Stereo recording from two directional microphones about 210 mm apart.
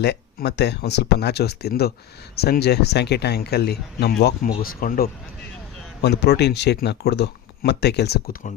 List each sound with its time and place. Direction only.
0.0 s speech: 55° left (ahead or behind)